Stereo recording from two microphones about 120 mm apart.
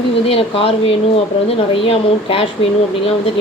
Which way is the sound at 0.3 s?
50° left (ahead or behind).